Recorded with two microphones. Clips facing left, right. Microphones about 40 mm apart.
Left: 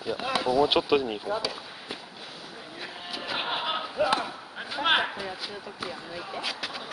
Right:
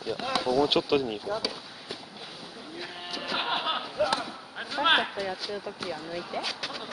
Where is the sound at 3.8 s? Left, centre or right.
Centre.